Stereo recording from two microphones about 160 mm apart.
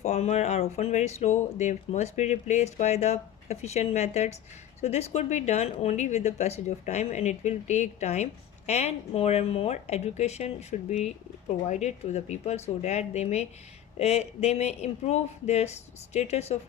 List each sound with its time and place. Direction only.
0.0 s speech: 45° left (ahead or behind)